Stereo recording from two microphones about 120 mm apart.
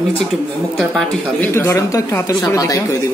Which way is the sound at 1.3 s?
20° left (ahead or behind).